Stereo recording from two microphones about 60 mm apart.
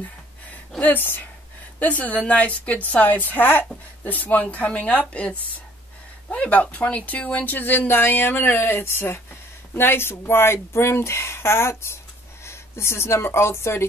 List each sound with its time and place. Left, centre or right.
0.7 s a woman's voice: left